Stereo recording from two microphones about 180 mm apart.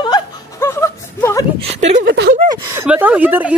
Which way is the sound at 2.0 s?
65° right (ahead or behind).